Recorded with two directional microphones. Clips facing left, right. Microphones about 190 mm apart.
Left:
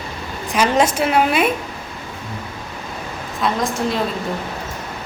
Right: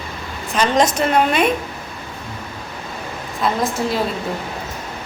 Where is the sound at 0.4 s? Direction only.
10° left (ahead or behind).